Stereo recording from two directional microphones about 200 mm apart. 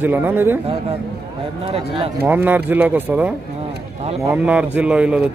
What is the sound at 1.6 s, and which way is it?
Speech, 30° right (ahead or behind).